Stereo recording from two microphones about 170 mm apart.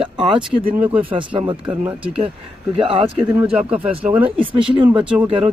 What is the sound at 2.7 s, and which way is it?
Speech, 30° right (ahead or behind).